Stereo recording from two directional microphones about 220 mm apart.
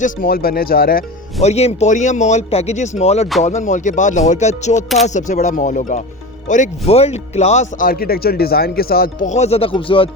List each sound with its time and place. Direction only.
0.0 s speech: 40° left (ahead or behind)
1.4 s speech: 30° left (ahead or behind)